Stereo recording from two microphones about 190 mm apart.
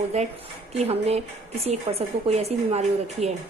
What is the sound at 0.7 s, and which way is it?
Speech, 35° right (ahead or behind).